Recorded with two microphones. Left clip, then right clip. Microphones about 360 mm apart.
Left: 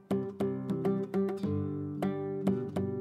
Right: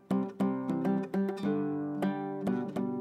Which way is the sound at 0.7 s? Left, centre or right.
Right.